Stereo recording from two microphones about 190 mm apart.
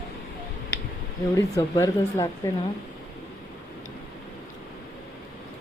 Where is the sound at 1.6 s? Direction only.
15° left (ahead or behind).